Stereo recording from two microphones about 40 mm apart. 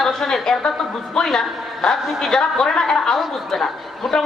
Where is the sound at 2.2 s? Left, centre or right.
Centre.